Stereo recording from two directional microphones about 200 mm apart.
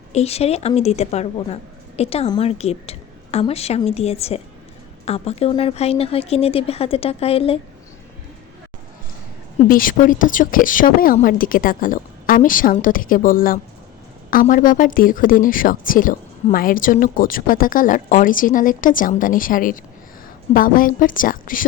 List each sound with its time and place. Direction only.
0.1 s a woman's voice: 30° left (ahead or behind)
9.6 s speech: 45° left (ahead or behind)